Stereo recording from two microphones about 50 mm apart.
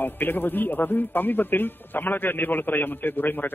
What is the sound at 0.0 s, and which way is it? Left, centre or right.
A man's voice, left.